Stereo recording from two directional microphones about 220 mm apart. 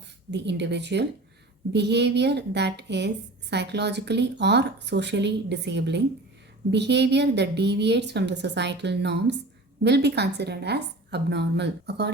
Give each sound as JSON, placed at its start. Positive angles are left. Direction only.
{"t": 0.3, "sound": "a woman's voice", "side_deg": -50}